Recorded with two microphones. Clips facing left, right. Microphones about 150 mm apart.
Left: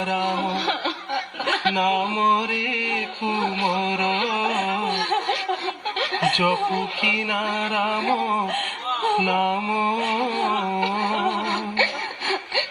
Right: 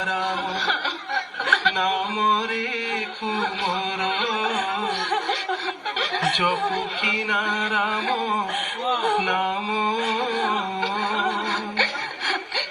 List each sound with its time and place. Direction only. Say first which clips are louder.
0.0 s speech: left 3 dB; 25° left (ahead or behind)
3.9 s carnatic music: left 2 dB; 15° left (ahead or behind)
4.9 s chuckle: left 2 dB; 25° left (ahead or behind)
6.0 s snicker: left 2 dB; 25° left (ahead or behind)
7.3 s speech: left 1 dB; 25° left (ahead or behind)
7.9 s music: left 2 dB; 15° left (ahead or behind)